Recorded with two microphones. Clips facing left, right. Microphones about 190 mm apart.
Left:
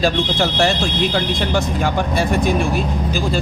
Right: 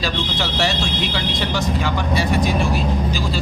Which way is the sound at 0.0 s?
50° left (ahead or behind).